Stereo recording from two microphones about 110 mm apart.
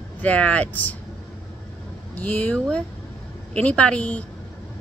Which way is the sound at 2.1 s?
15° left (ahead or behind).